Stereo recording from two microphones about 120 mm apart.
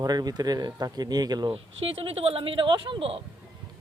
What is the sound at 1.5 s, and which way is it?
Speech, 50° right (ahead or behind).